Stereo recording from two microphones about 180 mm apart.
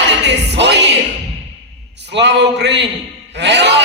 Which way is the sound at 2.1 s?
75° right (ahead or behind).